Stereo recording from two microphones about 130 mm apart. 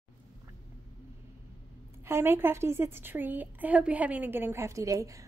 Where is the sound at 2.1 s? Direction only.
20° right (ahead or behind).